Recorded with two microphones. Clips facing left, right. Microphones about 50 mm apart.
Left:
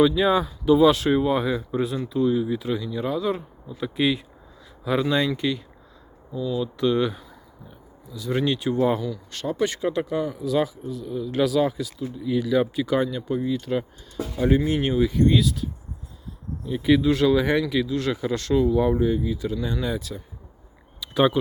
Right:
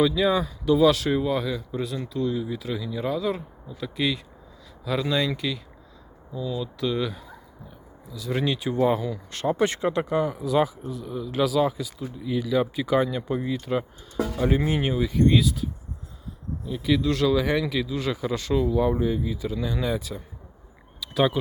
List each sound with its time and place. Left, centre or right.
0.0 s speech: centre
1.2 s speech: left
2.0 s speech: centre
9.0 s speech: right
9.8 s speech: centre
14.3 s speech: centre
16.6 s speech: centre
21.0 s a sound: centre